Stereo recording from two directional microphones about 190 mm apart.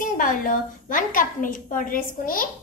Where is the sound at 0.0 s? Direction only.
45° left (ahead or behind).